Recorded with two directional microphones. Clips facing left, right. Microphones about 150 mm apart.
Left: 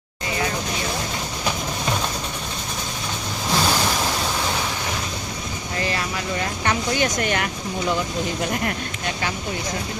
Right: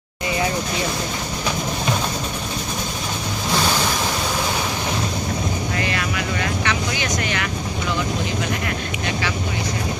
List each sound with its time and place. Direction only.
6.7 s vehicle: 45° left (ahead or behind)